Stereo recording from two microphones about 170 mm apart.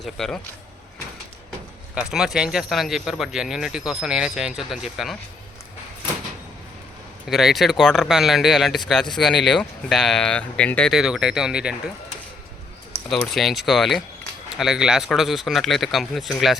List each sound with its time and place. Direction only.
0.0 s speech: centre (ahead or behind)
2.0 s speech: 5° right (ahead or behind)
7.3 s speech: centre (ahead or behind)
13.3 s speech: centre (ahead or behind)